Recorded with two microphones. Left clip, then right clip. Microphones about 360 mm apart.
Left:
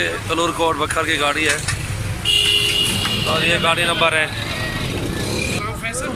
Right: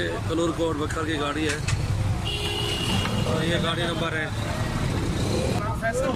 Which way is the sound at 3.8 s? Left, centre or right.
Left.